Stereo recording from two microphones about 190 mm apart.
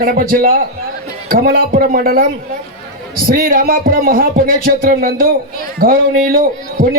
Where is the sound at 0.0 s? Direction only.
50° right (ahead or behind).